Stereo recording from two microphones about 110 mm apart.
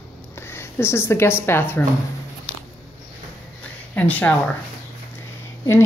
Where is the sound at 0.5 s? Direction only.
20° left (ahead or behind).